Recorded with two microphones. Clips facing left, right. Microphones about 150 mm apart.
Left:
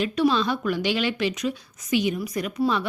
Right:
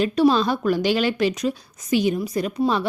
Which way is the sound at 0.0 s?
40° right (ahead or behind).